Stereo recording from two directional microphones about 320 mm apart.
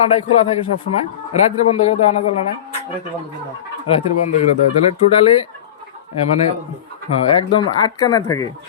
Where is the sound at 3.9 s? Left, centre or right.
Centre.